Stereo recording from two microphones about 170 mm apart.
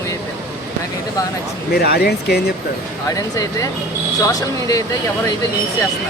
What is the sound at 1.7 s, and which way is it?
Speech, 65° left (ahead or behind).